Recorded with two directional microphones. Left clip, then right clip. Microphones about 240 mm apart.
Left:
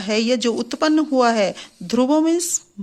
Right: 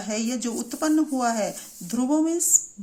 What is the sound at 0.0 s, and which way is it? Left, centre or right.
Speech, left.